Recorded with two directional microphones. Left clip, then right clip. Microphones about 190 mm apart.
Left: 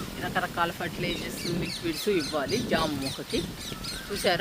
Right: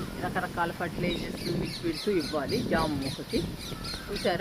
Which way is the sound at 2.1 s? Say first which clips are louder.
Left 2 dB; 55° left (ahead or behind).